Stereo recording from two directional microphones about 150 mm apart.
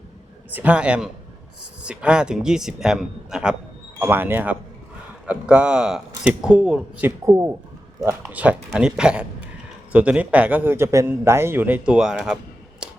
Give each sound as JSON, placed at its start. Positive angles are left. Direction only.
{"t": 0.5, "sound": "speech", "side_deg": -10}
{"t": 4.0, "sound": "speech", "side_deg": -15}
{"t": 7.3, "sound": "speech", "side_deg": -20}
{"t": 12.8, "sound": "finger snapping", "side_deg": -5}